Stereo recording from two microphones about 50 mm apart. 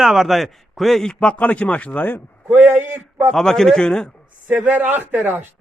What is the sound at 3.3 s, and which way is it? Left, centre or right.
Speech, centre.